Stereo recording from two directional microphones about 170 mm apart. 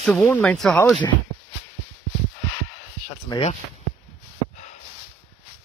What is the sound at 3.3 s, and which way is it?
Speech, 25° left (ahead or behind).